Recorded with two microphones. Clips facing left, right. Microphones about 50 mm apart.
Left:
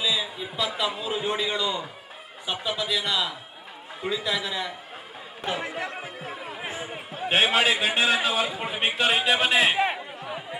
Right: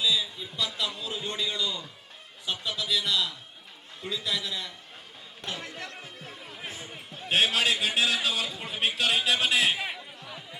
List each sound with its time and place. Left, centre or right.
0.0 s a man's voice: centre
5.4 s chatter: centre
7.1 s a man's voice: centre
9.7 s a sound: left